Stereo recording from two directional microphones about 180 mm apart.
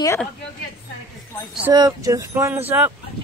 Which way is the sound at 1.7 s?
20° right (ahead or behind).